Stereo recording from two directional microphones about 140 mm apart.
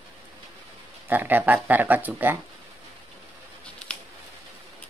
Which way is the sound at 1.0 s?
15° right (ahead or behind).